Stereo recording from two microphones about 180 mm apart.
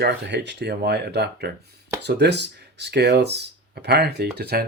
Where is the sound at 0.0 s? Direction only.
70° right (ahead or behind).